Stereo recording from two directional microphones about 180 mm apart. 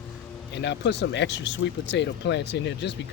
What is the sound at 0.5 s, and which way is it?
Speech, 75° left (ahead or behind).